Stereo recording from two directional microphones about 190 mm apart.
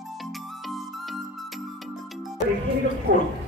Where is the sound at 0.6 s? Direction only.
Centre (ahead or behind).